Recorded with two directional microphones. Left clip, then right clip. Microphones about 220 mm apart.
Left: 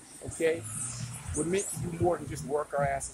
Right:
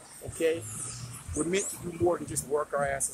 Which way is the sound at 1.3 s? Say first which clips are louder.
Right 1 dB; 5° right (ahead or behind).